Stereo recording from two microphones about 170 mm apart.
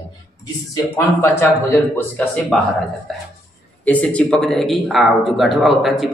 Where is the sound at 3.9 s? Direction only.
10° left (ahead or behind).